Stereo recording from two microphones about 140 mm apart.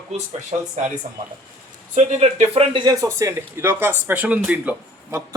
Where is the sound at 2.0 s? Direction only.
50° right (ahead or behind).